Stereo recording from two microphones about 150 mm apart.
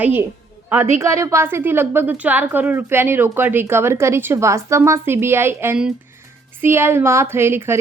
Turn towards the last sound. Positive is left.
turn(degrees=-15)  # may be behind; listen again after turning